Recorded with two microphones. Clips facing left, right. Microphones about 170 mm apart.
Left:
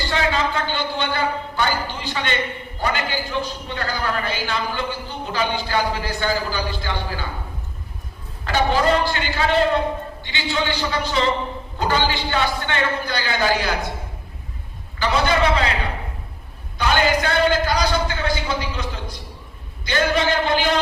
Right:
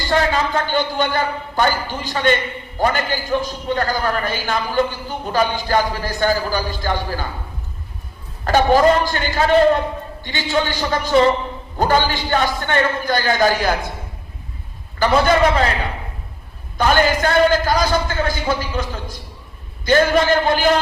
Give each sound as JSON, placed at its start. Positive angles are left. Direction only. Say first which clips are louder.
{"t": 0.1, "sound": "a man's voice", "louder": "right 5 dB", "side_deg": -45}
{"t": 8.4, "sound": "a man's voice", "louder": "right 5 dB", "side_deg": -45}
{"t": 14.9, "sound": "a man's voice", "louder": "right 5 dB", "side_deg": -45}
{"t": 16.7, "sound": "a man's voice", "louder": "right 3 dB", "side_deg": -45}